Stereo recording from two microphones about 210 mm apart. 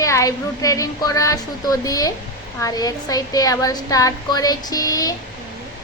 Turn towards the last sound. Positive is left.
turn(degrees=15)  # may be behind; listen again after turning